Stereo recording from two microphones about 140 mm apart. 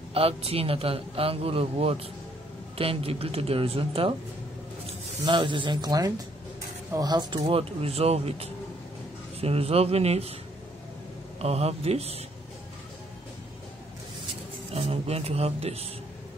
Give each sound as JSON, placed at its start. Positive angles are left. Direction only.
{"t": 0.1, "sound": "a man's voice", "side_deg": -45}
{"t": 5.2, "sound": "speech", "side_deg": -35}
{"t": 7.4, "sound": "a man's voice", "side_deg": -45}
{"t": 11.3, "sound": "a man's voice", "side_deg": -50}
{"t": 14.7, "sound": "speech", "side_deg": -45}